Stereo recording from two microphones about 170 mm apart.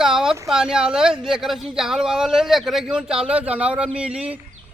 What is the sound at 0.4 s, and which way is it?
A man's voice, 5° right (ahead or behind).